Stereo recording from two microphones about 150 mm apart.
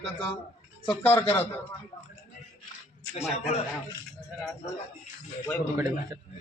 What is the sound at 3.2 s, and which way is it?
Speech, 45° left (ahead or behind).